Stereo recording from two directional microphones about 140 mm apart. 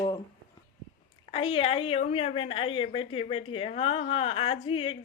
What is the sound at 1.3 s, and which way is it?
A woman's voice, 40° left (ahead or behind).